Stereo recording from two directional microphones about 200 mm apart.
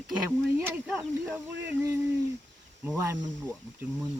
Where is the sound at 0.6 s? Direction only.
10° right (ahead or behind).